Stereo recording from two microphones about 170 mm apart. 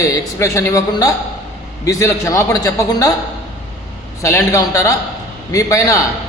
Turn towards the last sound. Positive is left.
turn(degrees=20)  # may be behind; listen again after turning